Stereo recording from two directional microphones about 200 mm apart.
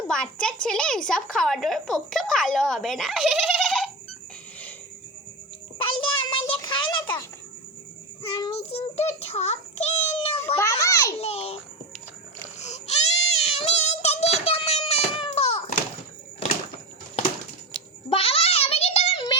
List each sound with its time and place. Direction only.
0.1 s a woman's voice: 5° left (ahead or behind)
5.8 s child singing: 25° left (ahead or behind)
6.5 s a sound: 25° left (ahead or behind)
8.2 s child singing: 30° left (ahead or behind)
10.6 s children playing: 15° left (ahead or behind)
11.2 s a child's voice: 30° left (ahead or behind)
12.5 s child singing: 35° left (ahead or behind)
18.1 s a sound: 30° left (ahead or behind)